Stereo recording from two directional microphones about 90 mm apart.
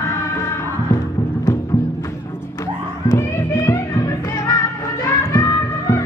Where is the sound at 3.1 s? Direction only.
35° left (ahead or behind).